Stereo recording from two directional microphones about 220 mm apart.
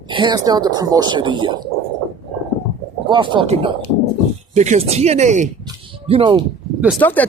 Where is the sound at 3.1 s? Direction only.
20° right (ahead or behind).